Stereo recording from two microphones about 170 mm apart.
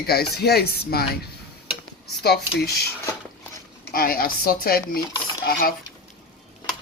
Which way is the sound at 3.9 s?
60° left (ahead or behind).